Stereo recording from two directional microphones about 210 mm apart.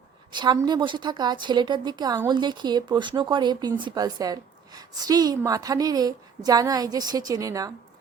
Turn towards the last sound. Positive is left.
turn(degrees=-15)  # may be behind; listen again after turning